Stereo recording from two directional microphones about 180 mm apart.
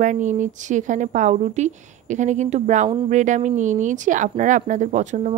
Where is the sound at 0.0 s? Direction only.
45° right (ahead or behind).